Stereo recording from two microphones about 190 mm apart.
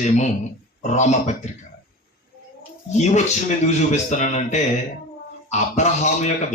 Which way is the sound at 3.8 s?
35° left (ahead or behind).